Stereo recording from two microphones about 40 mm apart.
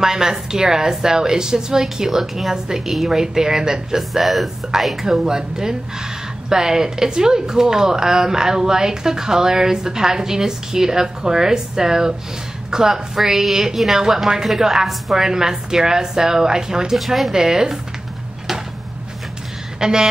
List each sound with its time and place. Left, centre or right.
0.0 s speech: centre
4.2 s a woman's voice: centre
5.2 s a woman's voice: centre
15.2 s speech: centre
16.9 s a woman's voice: centre
17.3 s speech: centre
19.8 s speech: centre